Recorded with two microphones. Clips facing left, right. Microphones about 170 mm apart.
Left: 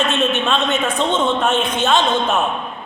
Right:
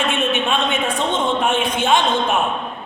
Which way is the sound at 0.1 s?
15° right (ahead or behind).